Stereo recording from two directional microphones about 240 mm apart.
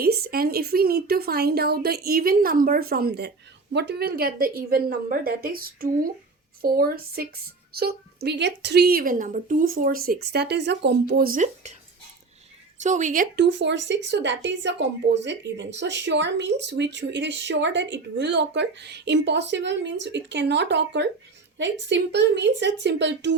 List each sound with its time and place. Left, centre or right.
0.0 s speech: right
12.8 s speech: right